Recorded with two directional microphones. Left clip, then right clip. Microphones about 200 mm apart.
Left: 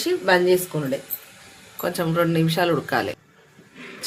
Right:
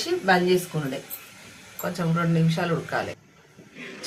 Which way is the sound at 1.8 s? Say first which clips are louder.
Left 6 dB; 55° left (ahead or behind).